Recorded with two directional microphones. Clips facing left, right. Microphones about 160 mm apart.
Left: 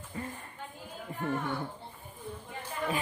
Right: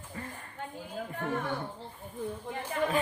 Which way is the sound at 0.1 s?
25° left (ahead or behind).